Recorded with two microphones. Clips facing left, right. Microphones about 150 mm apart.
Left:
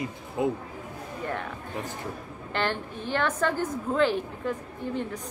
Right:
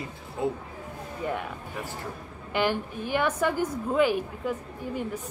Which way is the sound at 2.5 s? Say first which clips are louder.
Right 3 dB; 10° right (ahead or behind).